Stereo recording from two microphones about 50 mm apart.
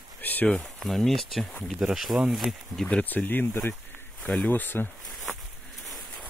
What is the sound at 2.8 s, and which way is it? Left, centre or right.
Speech, left.